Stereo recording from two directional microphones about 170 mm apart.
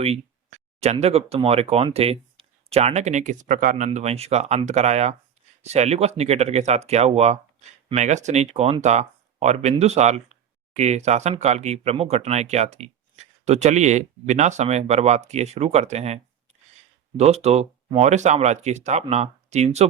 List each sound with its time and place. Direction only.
0.8 s speech: 40° right (ahead or behind)